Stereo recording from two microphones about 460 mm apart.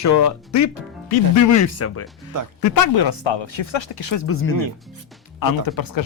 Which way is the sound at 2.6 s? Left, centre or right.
Left.